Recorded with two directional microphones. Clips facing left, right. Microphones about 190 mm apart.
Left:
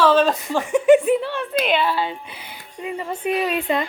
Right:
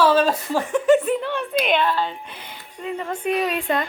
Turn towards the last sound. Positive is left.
turn(degrees=5)  # may be behind; listen again after turning